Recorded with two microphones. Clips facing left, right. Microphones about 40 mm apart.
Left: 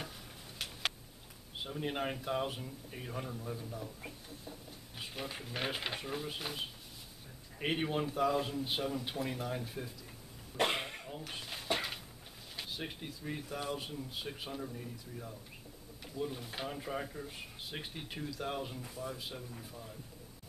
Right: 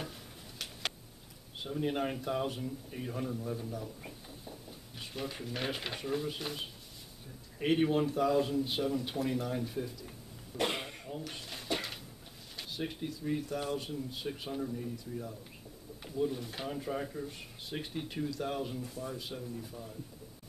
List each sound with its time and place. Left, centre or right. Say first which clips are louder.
1.6 s speech: right 4 dB; centre
10.6 s cough: left 1 dB; centre
11.1 s drawer open or close: right 1 dB; centre
12.5 s a man's voice: right 3 dB; centre